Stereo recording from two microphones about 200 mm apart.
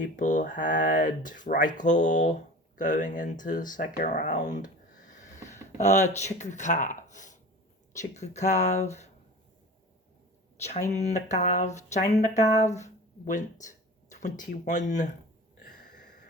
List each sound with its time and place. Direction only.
0.2 s speech: 40° left (ahead or behind)
10.9 s speech: 35° left (ahead or behind)